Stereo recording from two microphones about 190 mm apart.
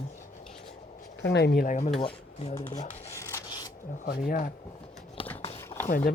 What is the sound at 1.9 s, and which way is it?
Speech, 30° left (ahead or behind).